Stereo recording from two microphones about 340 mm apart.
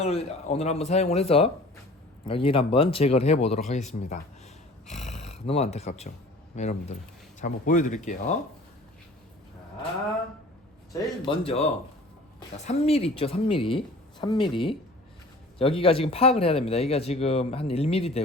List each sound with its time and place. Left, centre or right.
0.0 s speech: centre
10.9 s speech: centre